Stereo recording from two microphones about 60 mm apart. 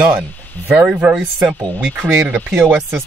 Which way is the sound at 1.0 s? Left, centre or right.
Right.